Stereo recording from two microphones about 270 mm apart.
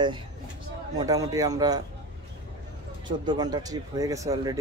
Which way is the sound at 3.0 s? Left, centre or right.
Centre.